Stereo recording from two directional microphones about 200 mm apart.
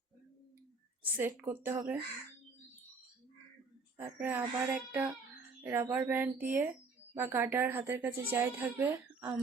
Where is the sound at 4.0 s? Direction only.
10° right (ahead or behind).